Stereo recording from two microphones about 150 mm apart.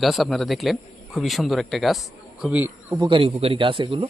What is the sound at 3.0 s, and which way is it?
A man's voice, 35° right (ahead or behind).